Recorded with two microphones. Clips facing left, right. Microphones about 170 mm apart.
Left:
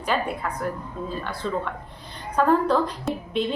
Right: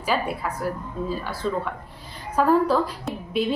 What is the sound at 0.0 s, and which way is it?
A woman's voice, 5° right (ahead or behind).